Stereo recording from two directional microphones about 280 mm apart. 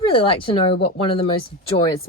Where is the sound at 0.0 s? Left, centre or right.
Centre.